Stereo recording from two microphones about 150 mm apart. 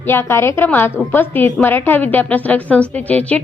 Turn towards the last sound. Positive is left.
turn(degrees=10)  # may be behind; listen again after turning